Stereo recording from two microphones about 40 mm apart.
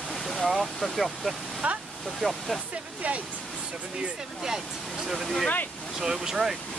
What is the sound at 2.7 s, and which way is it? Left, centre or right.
Speech, right.